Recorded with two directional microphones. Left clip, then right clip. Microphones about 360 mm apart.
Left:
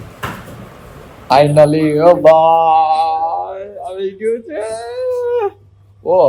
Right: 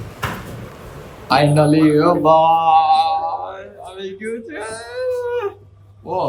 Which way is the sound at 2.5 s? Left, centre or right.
Right.